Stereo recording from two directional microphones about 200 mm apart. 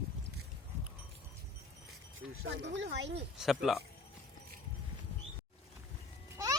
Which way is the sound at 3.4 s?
Centre (ahead or behind).